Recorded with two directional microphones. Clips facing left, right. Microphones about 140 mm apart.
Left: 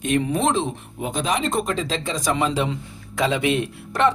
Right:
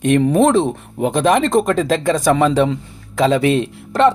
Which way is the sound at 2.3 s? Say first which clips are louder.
Right 5 dB; 40° right (ahead or behind).